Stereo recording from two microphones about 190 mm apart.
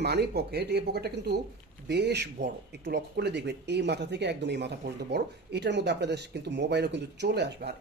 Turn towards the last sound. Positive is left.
turn(degrees=-65)  # may be behind; listen again after turning